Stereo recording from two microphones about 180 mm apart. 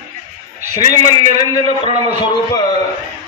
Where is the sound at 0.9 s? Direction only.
20° left (ahead or behind).